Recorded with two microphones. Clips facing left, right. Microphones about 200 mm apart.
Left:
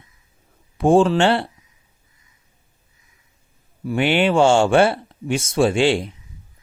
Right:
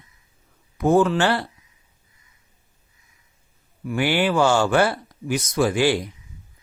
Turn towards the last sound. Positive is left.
turn(degrees=25)  # may be behind; listen again after turning